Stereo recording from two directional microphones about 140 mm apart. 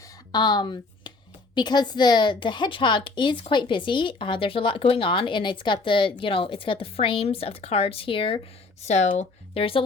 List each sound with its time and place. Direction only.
0.3 s a woman's voice: 30° left (ahead or behind)
8.8 s speech: 55° left (ahead or behind)